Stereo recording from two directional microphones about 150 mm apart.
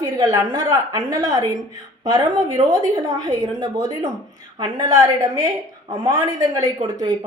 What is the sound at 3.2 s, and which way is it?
A woman's voice, 25° right (ahead or behind).